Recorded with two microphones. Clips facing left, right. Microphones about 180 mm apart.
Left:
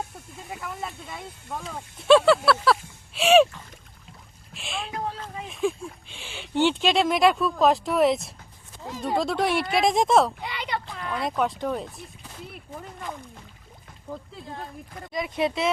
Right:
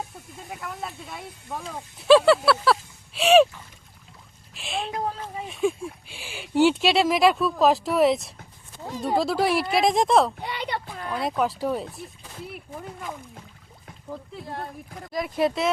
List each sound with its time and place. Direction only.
0.6 s speech: centre (ahead or behind)
4.5 s speech: centre (ahead or behind)
4.9 s speech: 40° right (ahead or behind)
5.5 s speech: centre (ahead or behind)
14.9 s speech: centre (ahead or behind)